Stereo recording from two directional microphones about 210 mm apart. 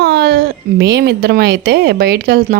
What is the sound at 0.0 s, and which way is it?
Speech, 50° right (ahead or behind).